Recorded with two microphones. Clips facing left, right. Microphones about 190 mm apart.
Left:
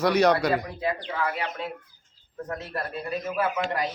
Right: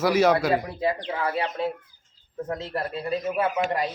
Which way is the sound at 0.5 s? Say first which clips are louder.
Right 3 dB; 30° right (ahead or behind).